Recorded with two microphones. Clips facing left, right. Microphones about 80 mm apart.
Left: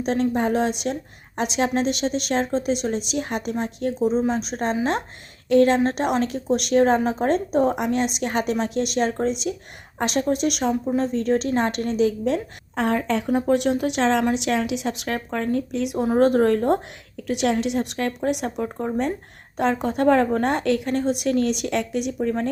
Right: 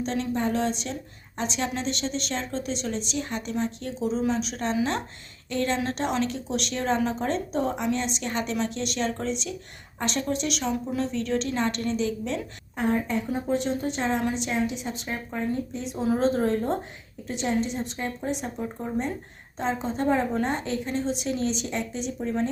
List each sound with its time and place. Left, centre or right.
0.0 s a woman's voice: left
12.7 s a woman's voice: left
16.0 s a woman's voice: left